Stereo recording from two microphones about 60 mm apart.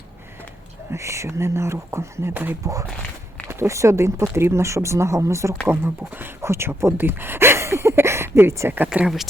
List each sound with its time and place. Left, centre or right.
0.9 s speech: right
2.3 s speech: right
3.5 s speech: right
5.6 s speech: right
6.4 s speech: right
9.0 s speech: centre